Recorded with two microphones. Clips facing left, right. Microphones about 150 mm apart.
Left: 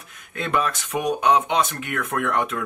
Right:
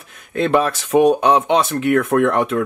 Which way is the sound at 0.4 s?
30° right (ahead or behind).